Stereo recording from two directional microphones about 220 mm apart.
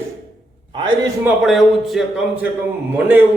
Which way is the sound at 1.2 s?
Centre (ahead or behind).